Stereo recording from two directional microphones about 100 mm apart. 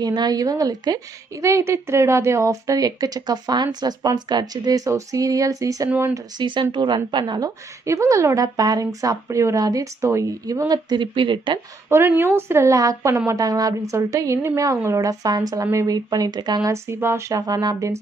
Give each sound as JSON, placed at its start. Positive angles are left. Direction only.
{"t": 0.0, "sound": "a woman's voice", "side_deg": -45}
{"t": 6.1, "sound": "a woman's voice", "side_deg": -50}
{"t": 10.7, "sound": "speech", "side_deg": -50}
{"t": 11.9, "sound": "a woman's voice", "side_deg": -25}
{"t": 16.7, "sound": "a woman's voice", "side_deg": -25}
{"t": 17.4, "sound": "a woman's voice", "side_deg": -40}